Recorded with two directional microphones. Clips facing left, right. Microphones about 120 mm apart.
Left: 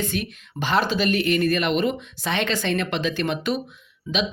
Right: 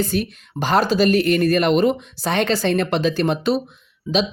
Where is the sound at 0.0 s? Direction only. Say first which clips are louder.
Right 5 dB; 35° right (ahead or behind).